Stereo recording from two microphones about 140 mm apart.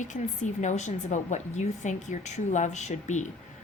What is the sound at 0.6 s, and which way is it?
A woman's voice, 60° left (ahead or behind).